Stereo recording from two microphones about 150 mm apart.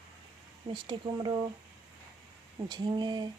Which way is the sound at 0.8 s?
30° right (ahead or behind).